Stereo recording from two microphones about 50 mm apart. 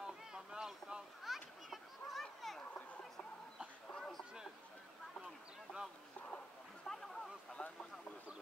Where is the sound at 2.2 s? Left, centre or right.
Centre.